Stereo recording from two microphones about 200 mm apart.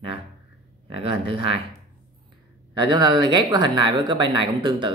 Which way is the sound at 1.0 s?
25° right (ahead or behind).